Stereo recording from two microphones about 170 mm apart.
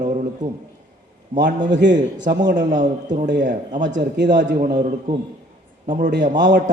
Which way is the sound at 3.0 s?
45° right (ahead or behind).